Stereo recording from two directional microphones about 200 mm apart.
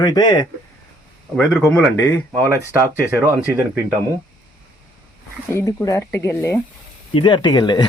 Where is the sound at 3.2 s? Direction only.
10° right (ahead or behind).